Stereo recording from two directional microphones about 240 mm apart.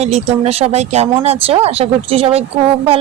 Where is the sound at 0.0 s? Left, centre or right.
Right.